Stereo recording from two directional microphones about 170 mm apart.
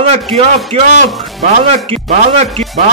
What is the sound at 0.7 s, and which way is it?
Speech, 35° right (ahead or behind).